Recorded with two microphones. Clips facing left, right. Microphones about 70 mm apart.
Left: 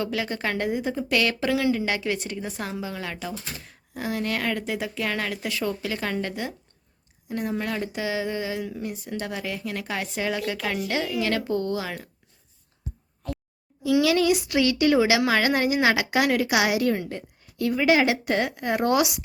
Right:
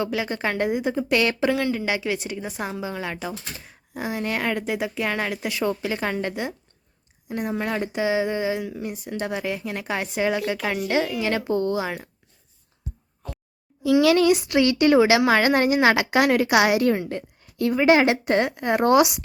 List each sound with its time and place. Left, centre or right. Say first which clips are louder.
0.0 s speech: right 2 dB; centre
1.7 s speech: right 1 dB; centre
14.0 s a woman's voice: right 4 dB; right
14.4 s speech: right 3 dB; right